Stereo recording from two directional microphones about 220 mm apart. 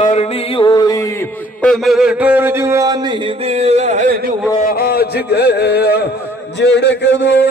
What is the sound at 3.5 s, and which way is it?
Music, 30° right (ahead or behind).